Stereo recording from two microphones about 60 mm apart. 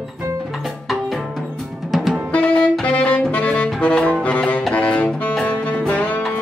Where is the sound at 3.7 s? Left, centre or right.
Centre.